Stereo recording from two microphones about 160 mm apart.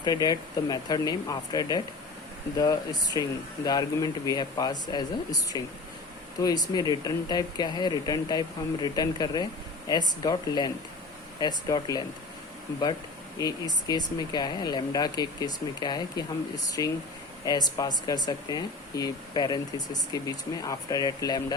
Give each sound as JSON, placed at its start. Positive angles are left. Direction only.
{"t": 0.0, "sound": "speech", "side_deg": 25}
{"t": 13.4, "sound": "speech", "side_deg": 25}